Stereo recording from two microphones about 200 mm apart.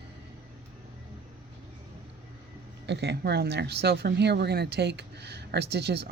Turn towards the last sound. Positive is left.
turn(degrees=-55)  # may be behind; listen again after turning